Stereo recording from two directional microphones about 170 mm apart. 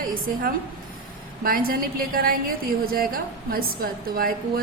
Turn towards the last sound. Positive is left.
turn(degrees=-60)  # may be behind; listen again after turning